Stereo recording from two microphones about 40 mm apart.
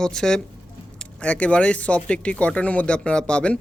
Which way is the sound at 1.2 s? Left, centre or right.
Left.